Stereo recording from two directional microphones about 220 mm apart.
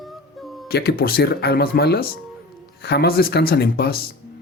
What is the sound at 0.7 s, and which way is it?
Speech, 45° left (ahead or behind).